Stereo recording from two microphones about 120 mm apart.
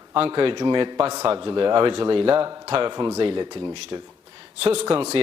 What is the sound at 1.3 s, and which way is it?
A man's voice, 45° right (ahead or behind).